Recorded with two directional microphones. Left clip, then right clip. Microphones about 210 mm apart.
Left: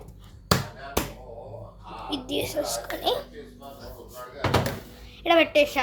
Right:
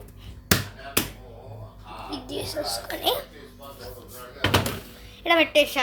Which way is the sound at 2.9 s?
10° right (ahead or behind).